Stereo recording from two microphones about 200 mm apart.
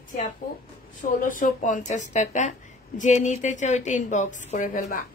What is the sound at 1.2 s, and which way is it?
A woman's voice, 40° left (ahead or behind).